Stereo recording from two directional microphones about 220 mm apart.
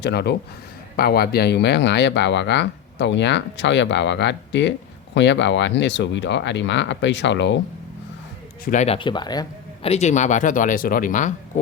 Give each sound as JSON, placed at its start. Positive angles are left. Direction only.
{"t": 0.0, "sound": "speech", "side_deg": 50}
{"t": 8.6, "sound": "speech", "side_deg": 35}
{"t": 9.9, "sound": "speech", "side_deg": 30}